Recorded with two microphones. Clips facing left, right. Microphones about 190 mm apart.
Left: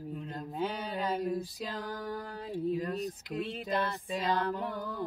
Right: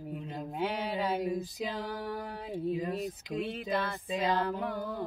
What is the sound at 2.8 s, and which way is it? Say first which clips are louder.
Speech: even; 15° right (ahead or behind).